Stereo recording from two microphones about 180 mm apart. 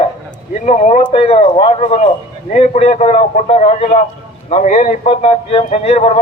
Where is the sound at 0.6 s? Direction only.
40° left (ahead or behind).